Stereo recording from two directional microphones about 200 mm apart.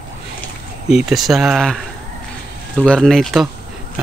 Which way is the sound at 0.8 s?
Centre (ahead or behind).